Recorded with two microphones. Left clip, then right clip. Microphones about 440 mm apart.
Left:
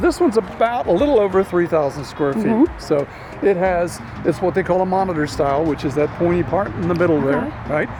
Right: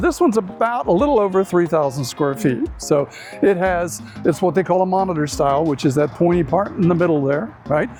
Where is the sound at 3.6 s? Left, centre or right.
Left.